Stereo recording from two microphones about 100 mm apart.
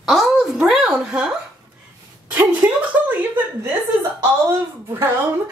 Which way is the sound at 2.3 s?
15° right (ahead or behind).